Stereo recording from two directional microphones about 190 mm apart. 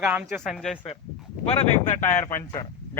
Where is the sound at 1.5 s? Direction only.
30° left (ahead or behind).